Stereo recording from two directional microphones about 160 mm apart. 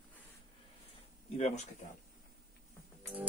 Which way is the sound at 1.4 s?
45° left (ahead or behind).